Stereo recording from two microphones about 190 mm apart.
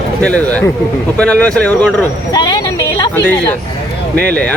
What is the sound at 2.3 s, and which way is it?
Vehicle, 20° left (ahead or behind).